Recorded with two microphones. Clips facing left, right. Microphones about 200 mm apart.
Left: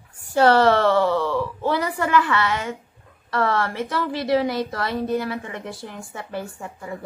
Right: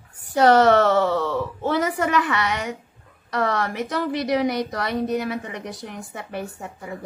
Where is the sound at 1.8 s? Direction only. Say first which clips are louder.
Even; 20° right (ahead or behind).